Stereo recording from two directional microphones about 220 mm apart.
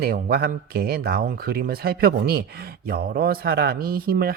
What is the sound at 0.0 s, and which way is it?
Speech, 45° right (ahead or behind).